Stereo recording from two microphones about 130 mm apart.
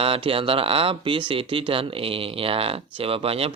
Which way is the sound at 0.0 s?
45° right (ahead or behind).